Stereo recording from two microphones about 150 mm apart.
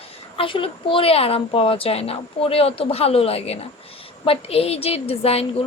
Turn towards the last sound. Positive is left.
turn(degrees=40)  # may be behind; listen again after turning